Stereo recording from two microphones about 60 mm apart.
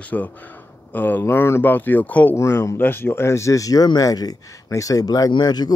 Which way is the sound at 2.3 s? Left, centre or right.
Left.